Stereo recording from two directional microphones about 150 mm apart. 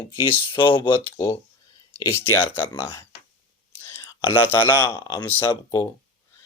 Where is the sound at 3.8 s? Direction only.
15° left (ahead or behind).